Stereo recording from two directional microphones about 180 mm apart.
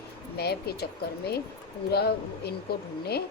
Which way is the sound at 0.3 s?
60° left (ahead or behind).